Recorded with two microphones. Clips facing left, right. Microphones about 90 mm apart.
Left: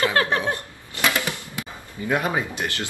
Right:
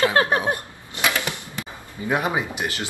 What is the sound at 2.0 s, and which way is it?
Speech, 20° right (ahead or behind).